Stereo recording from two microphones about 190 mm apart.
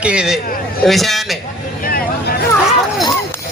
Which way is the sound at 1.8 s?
55° left (ahead or behind).